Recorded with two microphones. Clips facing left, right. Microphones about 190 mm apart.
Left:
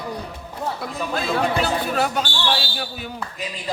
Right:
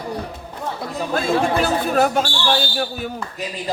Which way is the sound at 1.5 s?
45° right (ahead or behind).